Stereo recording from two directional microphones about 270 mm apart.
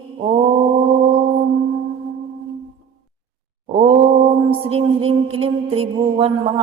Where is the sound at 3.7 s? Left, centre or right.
Right.